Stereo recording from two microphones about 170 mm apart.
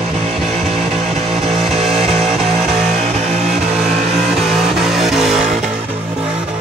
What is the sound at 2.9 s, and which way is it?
Vehicle, 40° right (ahead or behind).